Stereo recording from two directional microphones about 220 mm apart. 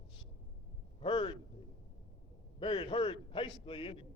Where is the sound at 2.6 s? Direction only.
25° left (ahead or behind).